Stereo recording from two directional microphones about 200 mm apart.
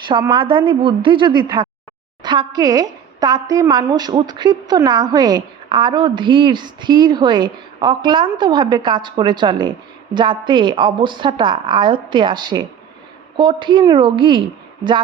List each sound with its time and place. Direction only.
0.1 s a woman's voice: 25° right (ahead or behind)